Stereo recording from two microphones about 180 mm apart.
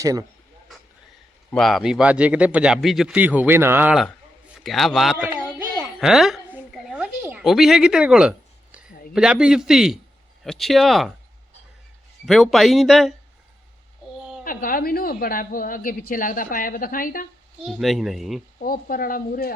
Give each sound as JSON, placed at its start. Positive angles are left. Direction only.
{"t": 0.0, "sound": "speech", "side_deg": -20}
{"t": 1.5, "sound": "speech", "side_deg": 0}
{"t": 4.6, "sound": "speech", "side_deg": 0}
{"t": 5.7, "sound": "a sound", "side_deg": -5}
{"t": 7.4, "sound": "speech", "side_deg": 0}
{"t": 12.2, "sound": "speech", "side_deg": 0}
{"t": 14.2, "sound": "a sound", "side_deg": -5}
{"t": 14.4, "sound": "speech", "side_deg": 50}
{"t": 17.6, "sound": "speech", "side_deg": 0}
{"t": 18.6, "sound": "speech", "side_deg": 55}